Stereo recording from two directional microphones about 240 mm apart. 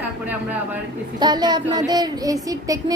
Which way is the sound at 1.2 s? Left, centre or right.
Centre.